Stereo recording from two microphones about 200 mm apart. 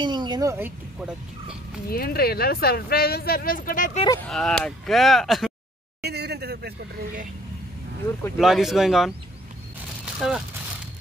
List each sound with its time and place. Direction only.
0.0 s a woman's voice: 20° right (ahead or behind)
1.9 s speech: 50° left (ahead or behind)
4.3 s speech: centre (ahead or behind)
6.0 s a sound: 55° right (ahead or behind)
8.4 s speech: centre (ahead or behind)
10.2 s speech: centre (ahead or behind)